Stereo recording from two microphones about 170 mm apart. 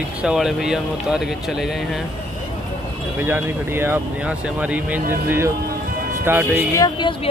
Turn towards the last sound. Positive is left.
turn(degrees=20)  # may be behind; listen again after turning